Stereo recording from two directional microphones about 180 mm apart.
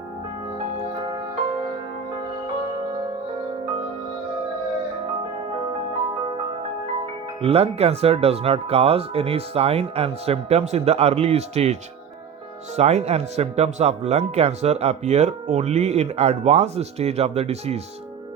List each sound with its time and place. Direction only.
0.9 s music: 25° right (ahead or behind)
7.0 s speech: 35° right (ahead or behind)